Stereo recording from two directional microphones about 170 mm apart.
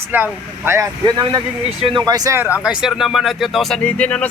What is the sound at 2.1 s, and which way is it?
Speech, 20° right (ahead or behind).